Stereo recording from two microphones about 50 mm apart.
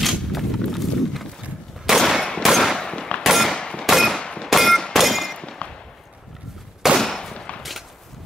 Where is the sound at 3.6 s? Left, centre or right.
Centre.